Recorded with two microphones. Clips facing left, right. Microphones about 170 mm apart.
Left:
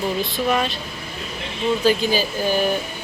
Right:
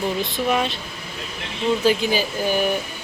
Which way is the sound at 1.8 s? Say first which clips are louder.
Left 2 dB; 15° right (ahead or behind).